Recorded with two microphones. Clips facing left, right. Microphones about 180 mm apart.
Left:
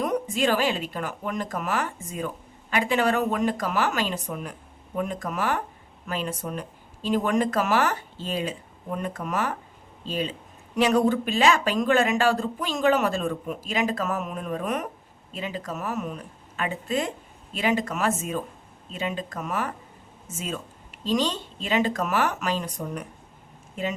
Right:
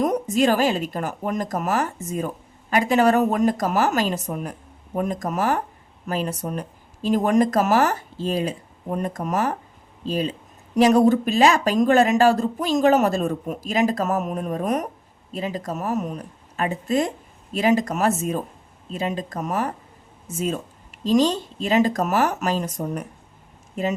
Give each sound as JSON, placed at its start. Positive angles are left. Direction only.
{"t": 0.0, "sound": "speech", "side_deg": -40}